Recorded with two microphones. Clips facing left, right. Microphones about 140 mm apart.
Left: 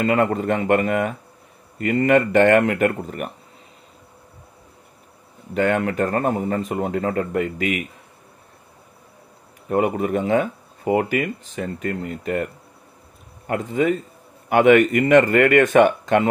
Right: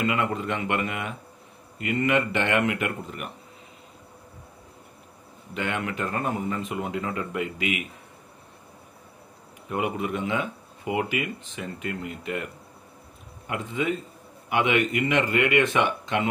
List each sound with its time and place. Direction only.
0.0 s speech: 45° left (ahead or behind)
5.5 s speech: 45° left (ahead or behind)
9.7 s speech: 45° left (ahead or behind)
13.5 s speech: 45° left (ahead or behind)